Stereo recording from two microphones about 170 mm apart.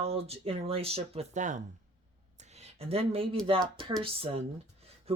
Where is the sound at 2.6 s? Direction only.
35° right (ahead or behind).